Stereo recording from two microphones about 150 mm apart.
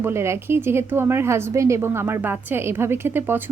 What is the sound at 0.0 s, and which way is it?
A woman's voice, 15° right (ahead or behind).